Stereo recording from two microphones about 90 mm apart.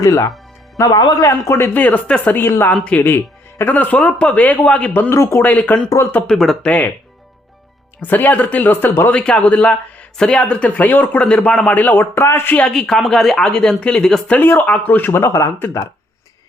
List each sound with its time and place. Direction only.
0.0 s speech: 40° left (ahead or behind)
1.2 s speech: 30° left (ahead or behind)
2.7 s speech: 10° left (ahead or behind)
5.1 s speech: 35° left (ahead or behind)
5.4 s speech: 20° left (ahead or behind)
5.9 s speech: 25° left (ahead or behind)
6.2 s speech: 5° left (ahead or behind)
6.7 s speech: 20° left (ahead or behind)
8.0 s speech: 20° left (ahead or behind)
12.6 s speech: 5° left (ahead or behind)
14.3 s speech: 20° left (ahead or behind)